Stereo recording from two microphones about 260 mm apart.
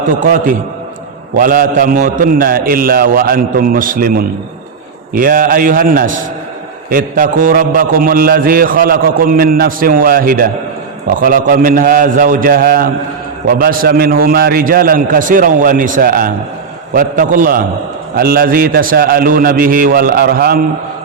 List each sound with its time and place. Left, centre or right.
0.2 s a man's voice: right